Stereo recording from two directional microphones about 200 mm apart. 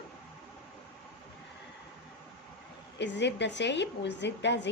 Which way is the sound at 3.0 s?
60° left (ahead or behind).